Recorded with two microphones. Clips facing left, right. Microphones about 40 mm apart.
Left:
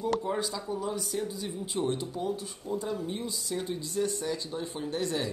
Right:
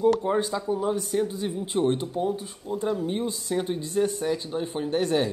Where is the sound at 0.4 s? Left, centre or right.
Right.